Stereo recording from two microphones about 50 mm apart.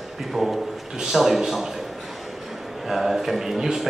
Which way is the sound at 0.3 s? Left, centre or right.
Centre.